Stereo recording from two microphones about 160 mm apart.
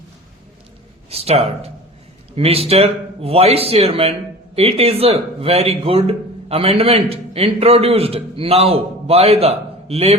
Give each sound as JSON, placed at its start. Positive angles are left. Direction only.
{"t": 1.1, "sound": "a man's voice", "side_deg": -40}